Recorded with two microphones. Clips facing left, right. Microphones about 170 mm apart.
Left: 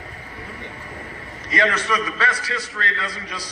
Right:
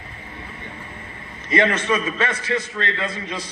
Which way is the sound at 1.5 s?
25° right (ahead or behind).